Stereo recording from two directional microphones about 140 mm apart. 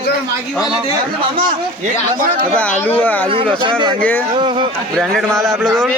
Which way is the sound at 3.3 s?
40° right (ahead or behind).